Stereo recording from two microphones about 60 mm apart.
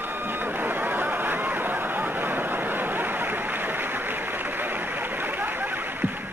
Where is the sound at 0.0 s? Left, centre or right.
Right.